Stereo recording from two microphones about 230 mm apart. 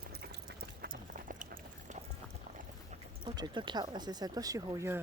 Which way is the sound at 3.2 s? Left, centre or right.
Centre.